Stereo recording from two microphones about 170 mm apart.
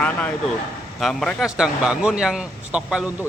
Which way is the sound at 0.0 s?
5° left (ahead or behind).